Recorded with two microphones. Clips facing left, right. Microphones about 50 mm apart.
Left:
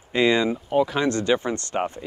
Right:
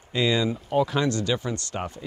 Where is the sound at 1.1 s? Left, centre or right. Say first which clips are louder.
Left 4 dB; left.